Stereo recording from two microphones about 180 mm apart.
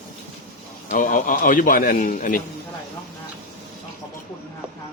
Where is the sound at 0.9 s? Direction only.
45° left (ahead or behind).